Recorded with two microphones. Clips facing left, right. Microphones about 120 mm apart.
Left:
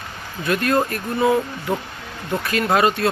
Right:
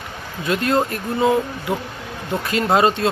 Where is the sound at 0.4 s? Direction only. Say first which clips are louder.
Even; 20° right (ahead or behind).